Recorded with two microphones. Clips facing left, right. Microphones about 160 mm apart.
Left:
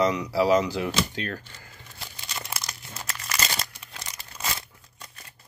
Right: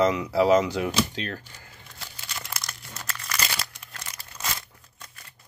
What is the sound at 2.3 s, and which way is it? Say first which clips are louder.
Crumpling: left 2 dB; 20° left (ahead or behind).